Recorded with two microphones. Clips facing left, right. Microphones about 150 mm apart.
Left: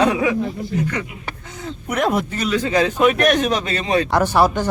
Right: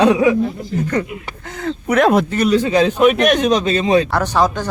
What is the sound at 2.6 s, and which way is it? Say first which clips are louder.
Speech: even; 20° right (ahead or behind).